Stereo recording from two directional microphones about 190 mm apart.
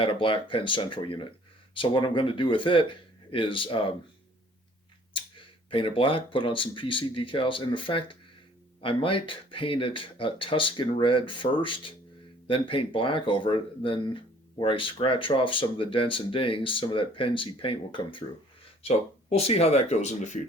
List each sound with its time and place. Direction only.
0.0 s speech: 25° left (ahead or behind)
5.1 s speech: 25° left (ahead or behind)